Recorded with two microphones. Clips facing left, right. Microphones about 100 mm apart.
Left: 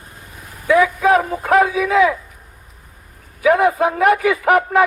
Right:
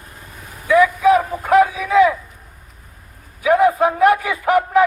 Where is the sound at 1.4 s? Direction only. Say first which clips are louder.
Right 1 dB; 90° left.